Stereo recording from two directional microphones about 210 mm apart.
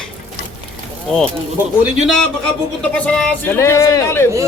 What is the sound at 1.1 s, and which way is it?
Speech, centre (ahead or behind).